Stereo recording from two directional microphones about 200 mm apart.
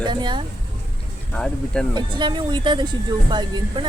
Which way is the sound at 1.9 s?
20° right (ahead or behind).